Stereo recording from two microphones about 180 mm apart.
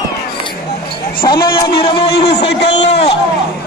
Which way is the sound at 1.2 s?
25° left (ahead or behind).